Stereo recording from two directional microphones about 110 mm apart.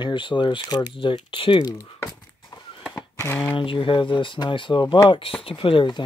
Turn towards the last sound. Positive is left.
turn(degrees=45)  # may be behind; listen again after turning